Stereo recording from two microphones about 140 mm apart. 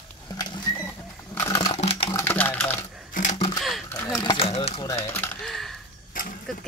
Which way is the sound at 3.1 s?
60° left (ahead or behind).